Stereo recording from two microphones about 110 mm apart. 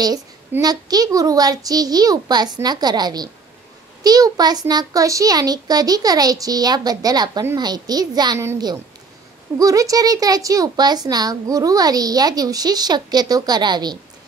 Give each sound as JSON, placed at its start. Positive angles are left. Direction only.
{"t": 0.6, "sound": "speech", "side_deg": -35}
{"t": 9.6, "sound": "speech", "side_deg": -30}